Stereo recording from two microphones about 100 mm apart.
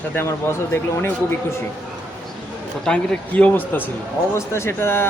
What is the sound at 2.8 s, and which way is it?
A woman's voice, 10° left (ahead or behind).